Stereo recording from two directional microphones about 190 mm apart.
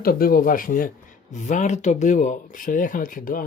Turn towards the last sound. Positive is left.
turn(degrees=45)  # may be behind; listen again after turning